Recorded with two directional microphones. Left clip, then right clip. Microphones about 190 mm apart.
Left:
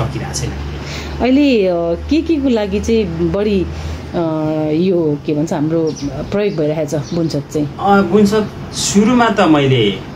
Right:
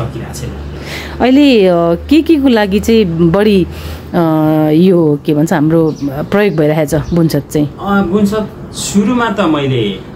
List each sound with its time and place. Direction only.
1.2 s speech: 25° right (ahead or behind)
7.8 s speech: centre (ahead or behind)